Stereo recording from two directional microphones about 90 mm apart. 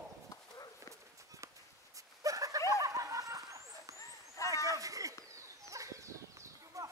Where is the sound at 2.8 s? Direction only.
40° right (ahead or behind).